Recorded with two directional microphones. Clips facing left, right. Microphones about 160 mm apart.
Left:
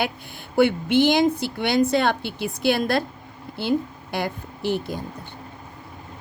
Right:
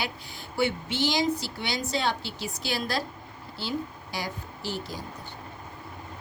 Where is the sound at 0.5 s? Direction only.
55° left (ahead or behind).